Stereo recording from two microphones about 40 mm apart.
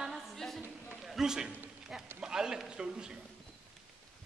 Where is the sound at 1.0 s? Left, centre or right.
Centre.